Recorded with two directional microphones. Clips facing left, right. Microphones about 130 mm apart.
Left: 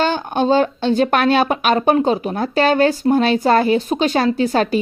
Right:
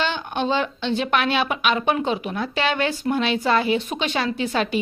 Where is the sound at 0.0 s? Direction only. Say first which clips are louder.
Left 7 dB; 40° left (ahead or behind).